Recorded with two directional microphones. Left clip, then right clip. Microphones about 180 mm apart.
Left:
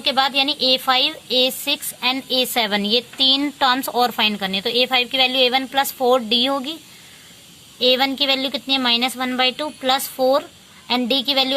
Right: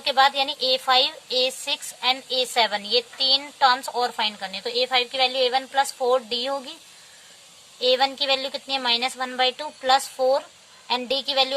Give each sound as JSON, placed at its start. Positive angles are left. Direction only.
{"t": 0.0, "sound": "a woman's voice", "side_deg": 20}
{"t": 7.8, "sound": "a woman's voice", "side_deg": 25}